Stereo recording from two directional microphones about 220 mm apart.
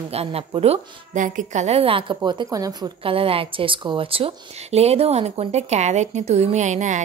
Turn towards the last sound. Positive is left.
turn(degrees=-35)  # may be behind; listen again after turning